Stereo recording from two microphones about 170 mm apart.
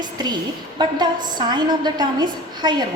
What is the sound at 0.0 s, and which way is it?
A woman's voice, 25° right (ahead or behind).